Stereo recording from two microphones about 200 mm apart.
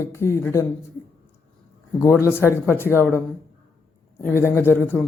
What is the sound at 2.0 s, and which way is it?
Speech, 15° left (ahead or behind).